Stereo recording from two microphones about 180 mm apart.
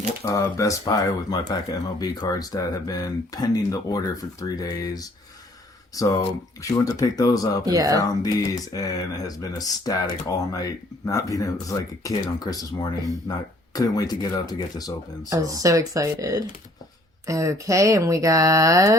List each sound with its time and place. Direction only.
0.3 s speech: 15° left (ahead or behind)
7.6 s speech: 20° right (ahead or behind)
8.0 s speech: 20° left (ahead or behind)
15.3 s speech: 20° right (ahead or behind)